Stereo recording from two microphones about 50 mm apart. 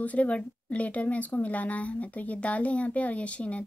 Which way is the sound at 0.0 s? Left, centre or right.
Left.